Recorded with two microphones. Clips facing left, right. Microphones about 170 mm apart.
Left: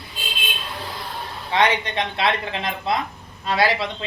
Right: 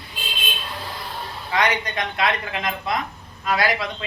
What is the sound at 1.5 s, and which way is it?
Speech, 25° left (ahead or behind).